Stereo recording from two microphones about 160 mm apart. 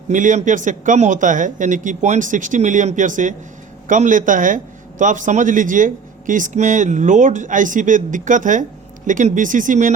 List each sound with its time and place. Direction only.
0.1 s a man's voice: 50° right (ahead or behind)